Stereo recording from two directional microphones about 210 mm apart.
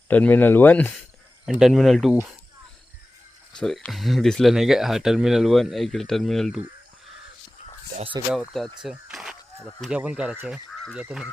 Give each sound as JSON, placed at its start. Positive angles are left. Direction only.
{"t": 0.1, "sound": "speech", "side_deg": 10}
{"t": 1.5, "sound": "speech", "side_deg": 0}
{"t": 3.6, "sound": "speech", "side_deg": 5}
{"t": 7.9, "sound": "speech", "side_deg": -25}
{"t": 8.4, "sound": "speech", "side_deg": 0}
{"t": 8.8, "sound": "a sound", "side_deg": -5}
{"t": 9.8, "sound": "speech", "side_deg": -5}